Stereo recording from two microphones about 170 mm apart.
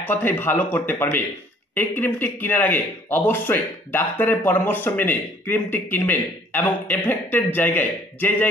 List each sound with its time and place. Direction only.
0.0 s speech: 10° left (ahead or behind)